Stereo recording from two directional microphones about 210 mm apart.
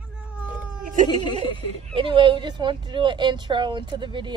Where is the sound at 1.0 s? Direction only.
20° left (ahead or behind).